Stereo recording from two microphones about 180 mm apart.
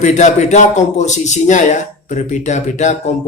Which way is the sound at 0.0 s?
40° left (ahead or behind).